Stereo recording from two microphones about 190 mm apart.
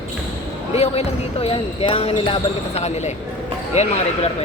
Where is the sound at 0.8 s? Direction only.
30° left (ahead or behind).